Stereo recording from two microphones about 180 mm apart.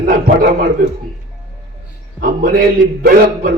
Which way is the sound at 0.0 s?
50° right (ahead or behind).